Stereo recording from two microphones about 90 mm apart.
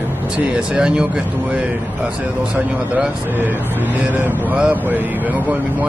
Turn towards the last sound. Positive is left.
turn(degrees=-20)  # may be behind; listen again after turning